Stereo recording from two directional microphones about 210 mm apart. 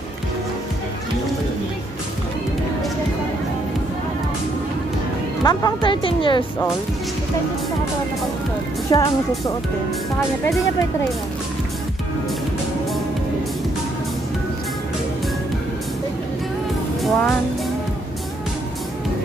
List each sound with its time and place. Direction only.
5.4 s speech: 20° left (ahead or behind)
8.9 s speech: 20° left (ahead or behind)
17.0 s speech: centre (ahead or behind)